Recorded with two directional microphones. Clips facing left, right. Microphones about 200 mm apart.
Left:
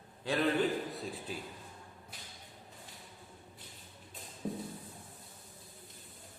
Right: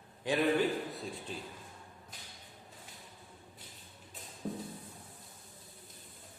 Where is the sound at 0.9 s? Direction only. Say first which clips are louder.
Left 1 dB; centre (ahead or behind).